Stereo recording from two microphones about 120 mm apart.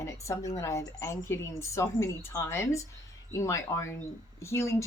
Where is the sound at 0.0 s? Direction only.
25° left (ahead or behind).